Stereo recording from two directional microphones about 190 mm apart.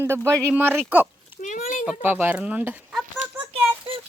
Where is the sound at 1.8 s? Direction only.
5° right (ahead or behind).